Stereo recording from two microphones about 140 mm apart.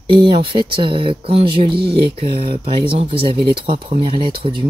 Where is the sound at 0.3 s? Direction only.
40° right (ahead or behind).